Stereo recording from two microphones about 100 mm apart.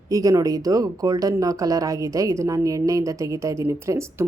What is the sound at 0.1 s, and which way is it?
Speech, 35° right (ahead or behind).